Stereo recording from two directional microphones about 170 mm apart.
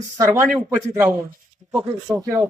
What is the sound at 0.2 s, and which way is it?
Speech, 10° right (ahead or behind).